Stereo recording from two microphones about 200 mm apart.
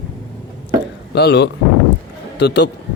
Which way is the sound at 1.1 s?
55° left (ahead or behind).